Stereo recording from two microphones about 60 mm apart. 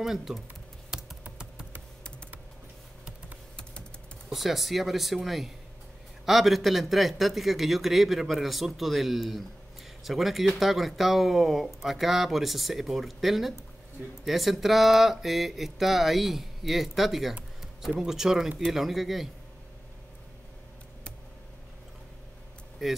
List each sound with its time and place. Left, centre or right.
0.0 s speech: centre
1.2 s a sound: centre
4.3 s speech: centre
22.8 s speech: centre